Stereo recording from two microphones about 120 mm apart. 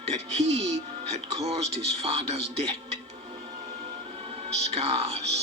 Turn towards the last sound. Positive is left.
turn(degrees=-60)  # may be behind; listen again after turning